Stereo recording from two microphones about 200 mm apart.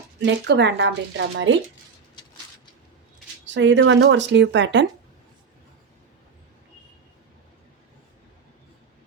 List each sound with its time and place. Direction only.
0.2 s speech: 60° right (ahead or behind)
3.4 s speech: 65° right (ahead or behind)